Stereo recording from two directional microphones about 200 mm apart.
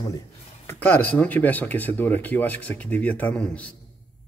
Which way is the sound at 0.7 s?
10° left (ahead or behind).